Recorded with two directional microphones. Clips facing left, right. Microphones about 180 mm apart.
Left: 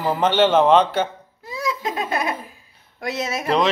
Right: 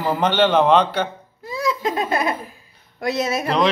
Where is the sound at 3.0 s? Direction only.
35° right (ahead or behind).